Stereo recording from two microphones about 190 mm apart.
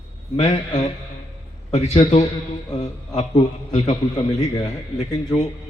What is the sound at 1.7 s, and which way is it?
A man's voice, 35° left (ahead or behind).